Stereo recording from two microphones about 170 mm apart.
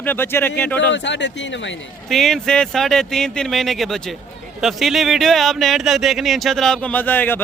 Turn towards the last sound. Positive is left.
turn(degrees=10)  # may be behind; listen again after turning